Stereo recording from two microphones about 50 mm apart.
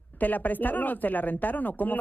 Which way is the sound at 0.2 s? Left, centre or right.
Left.